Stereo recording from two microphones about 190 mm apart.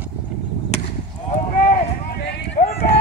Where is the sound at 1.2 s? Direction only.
50° left (ahead or behind).